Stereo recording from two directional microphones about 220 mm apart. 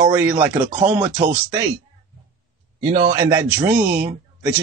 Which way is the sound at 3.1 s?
15° right (ahead or behind).